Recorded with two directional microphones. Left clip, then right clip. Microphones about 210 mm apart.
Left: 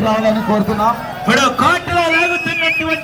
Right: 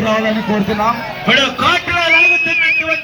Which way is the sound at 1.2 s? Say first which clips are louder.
Even; 25° left (ahead or behind).